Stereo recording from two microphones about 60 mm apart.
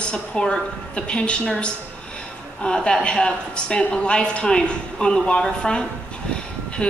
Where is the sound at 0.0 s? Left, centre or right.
Centre.